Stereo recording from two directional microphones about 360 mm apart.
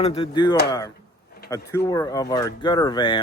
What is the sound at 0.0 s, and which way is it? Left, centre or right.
Speech, centre.